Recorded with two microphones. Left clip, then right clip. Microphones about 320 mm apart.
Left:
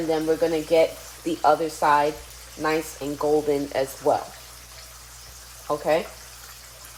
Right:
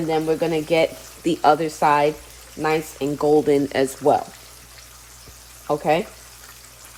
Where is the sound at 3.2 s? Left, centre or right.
Right.